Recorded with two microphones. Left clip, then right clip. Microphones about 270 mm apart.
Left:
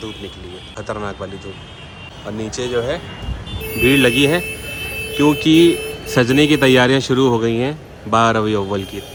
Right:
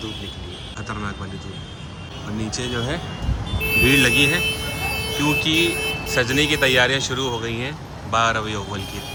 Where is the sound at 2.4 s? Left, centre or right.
Centre.